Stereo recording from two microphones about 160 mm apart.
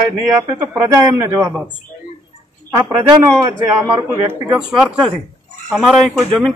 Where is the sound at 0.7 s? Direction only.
15° right (ahead or behind).